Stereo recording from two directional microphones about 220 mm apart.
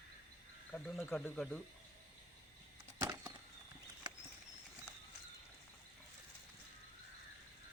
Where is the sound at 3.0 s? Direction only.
15° right (ahead or behind).